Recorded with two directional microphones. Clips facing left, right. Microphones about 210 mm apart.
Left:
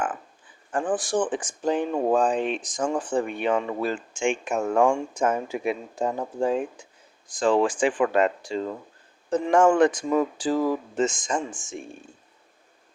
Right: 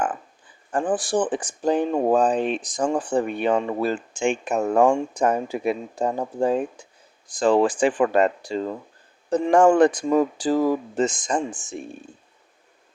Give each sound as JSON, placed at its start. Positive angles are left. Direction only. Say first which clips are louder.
{"t": 0.7, "sound": "speech", "louder": "right 2 dB", "side_deg": -35}